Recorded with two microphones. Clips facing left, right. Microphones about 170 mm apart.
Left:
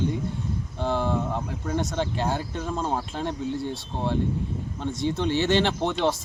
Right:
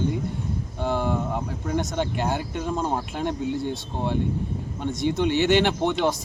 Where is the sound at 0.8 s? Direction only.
5° right (ahead or behind).